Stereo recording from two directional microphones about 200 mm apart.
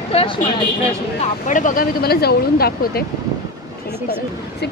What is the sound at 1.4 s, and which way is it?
Speech, 40° left (ahead or behind).